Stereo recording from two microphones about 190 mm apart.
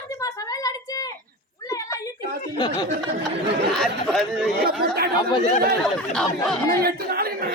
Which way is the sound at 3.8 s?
Centre (ahead or behind).